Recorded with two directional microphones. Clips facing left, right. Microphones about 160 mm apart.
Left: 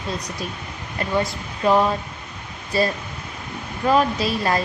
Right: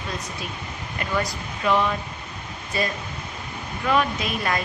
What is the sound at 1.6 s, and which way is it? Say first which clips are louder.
A woman's voice: left 4 dB; 40° left (ahead or behind).